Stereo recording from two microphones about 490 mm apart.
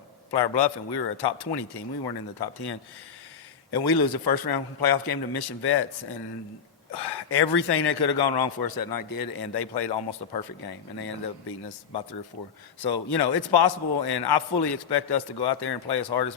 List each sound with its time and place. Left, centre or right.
0.3 s a man's voice: left
6.9 s a man's voice: left